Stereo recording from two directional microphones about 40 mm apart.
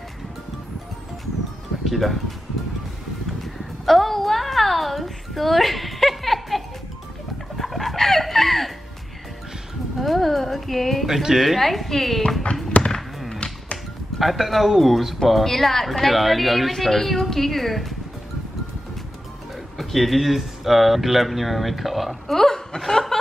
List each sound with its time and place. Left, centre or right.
1.9 s speech: centre
3.8 s a sound: centre
7.5 s chicken: centre
9.9 s a sound: centre
11.3 s a woman's voice: centre
12.7 s a sound: left
13.3 s music: left
14.1 s a woman's voice: centre
19.8 s speech: centre